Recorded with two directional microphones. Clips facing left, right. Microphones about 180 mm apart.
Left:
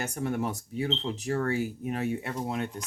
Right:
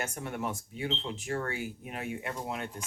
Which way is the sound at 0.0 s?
35° left (ahead or behind).